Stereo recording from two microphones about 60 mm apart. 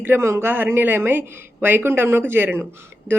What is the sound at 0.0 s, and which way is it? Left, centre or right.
Speech, right.